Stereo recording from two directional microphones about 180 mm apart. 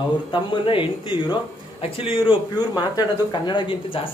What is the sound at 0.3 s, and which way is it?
Speech, 30° left (ahead or behind).